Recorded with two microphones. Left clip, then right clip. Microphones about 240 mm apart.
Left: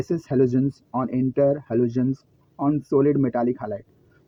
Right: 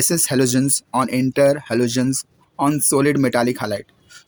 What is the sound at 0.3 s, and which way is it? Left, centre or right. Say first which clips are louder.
Speech: even; right.